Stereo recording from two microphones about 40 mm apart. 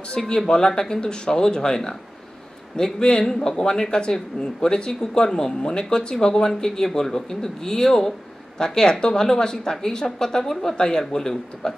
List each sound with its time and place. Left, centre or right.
0.2 s speech: centre